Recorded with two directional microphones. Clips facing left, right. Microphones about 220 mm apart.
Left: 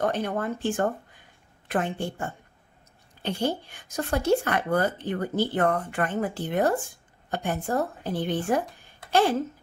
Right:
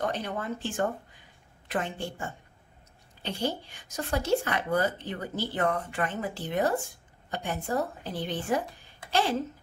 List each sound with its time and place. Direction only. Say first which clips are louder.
0.0 s speech: left 5 dB; 50° left (ahead or behind)